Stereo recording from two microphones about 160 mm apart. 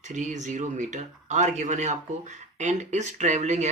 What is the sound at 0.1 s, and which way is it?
Speech, 50° right (ahead or behind).